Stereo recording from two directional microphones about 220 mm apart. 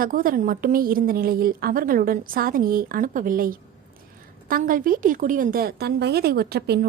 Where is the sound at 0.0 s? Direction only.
40° right (ahead or behind).